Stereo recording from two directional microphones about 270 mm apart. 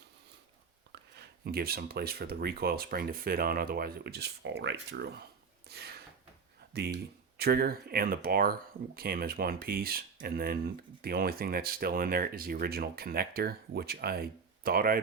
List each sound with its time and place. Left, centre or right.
1.1 s speech: right
5.6 s a sound: right
7.3 s speech: right